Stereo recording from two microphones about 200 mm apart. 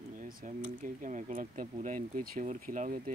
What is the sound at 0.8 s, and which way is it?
Speech, 40° right (ahead or behind).